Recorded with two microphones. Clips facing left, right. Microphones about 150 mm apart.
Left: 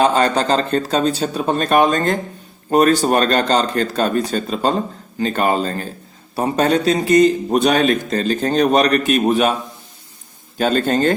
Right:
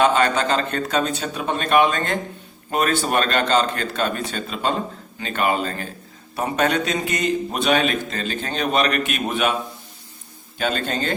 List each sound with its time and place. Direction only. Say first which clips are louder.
0.0 s a man's voice: left 2 dB; 35° left (ahead or behind)
10.6 s a man's voice: left 8 dB; 40° left (ahead or behind)